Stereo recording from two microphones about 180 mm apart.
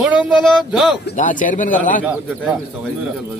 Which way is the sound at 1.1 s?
45° left (ahead or behind).